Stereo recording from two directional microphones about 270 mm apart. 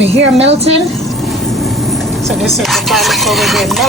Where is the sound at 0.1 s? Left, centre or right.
Right.